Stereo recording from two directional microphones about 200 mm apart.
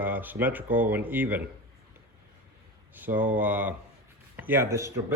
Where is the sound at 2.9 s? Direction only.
10° right (ahead or behind).